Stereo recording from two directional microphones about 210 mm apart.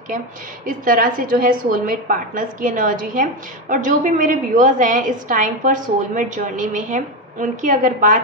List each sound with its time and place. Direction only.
0.7 s a woman's voice: 40° right (ahead or behind)